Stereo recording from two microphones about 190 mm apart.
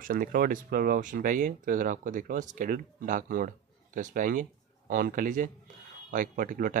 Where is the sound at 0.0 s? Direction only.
45° right (ahead or behind).